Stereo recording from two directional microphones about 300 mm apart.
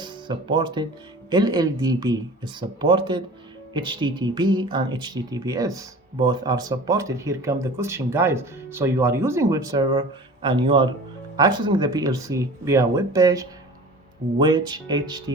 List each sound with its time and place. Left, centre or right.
0.0 s speech: centre